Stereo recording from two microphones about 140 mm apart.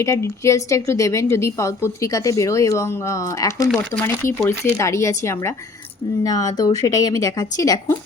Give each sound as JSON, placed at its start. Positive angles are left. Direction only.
{"t": 0.0, "sound": "a woman's voice", "side_deg": 20}